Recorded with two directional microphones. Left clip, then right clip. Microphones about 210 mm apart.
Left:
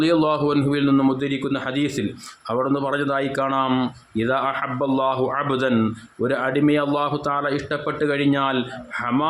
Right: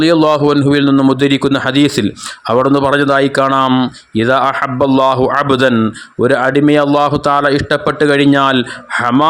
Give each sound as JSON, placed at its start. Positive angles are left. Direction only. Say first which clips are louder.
{"t": 0.0, "sound": "speech", "louder": "right 9 dB", "side_deg": -30}